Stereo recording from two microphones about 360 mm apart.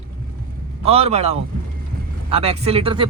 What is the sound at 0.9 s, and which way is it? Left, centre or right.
Speech, centre.